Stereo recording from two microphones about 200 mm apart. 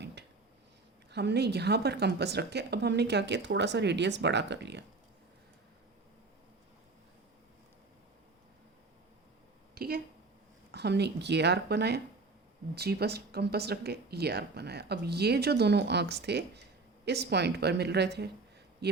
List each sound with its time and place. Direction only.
1.1 s a woman's voice: 55° right (ahead or behind)
9.7 s a sound: 50° right (ahead or behind)
10.7 s a woman's voice: 55° right (ahead or behind)